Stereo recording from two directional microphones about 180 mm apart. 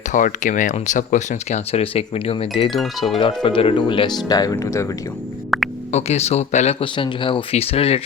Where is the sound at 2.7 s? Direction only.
Centre (ahead or behind).